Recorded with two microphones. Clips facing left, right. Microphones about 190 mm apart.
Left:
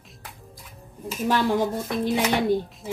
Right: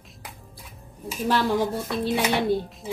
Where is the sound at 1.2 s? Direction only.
15° left (ahead or behind).